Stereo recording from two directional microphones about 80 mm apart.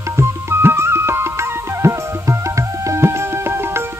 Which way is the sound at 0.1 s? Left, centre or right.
Right.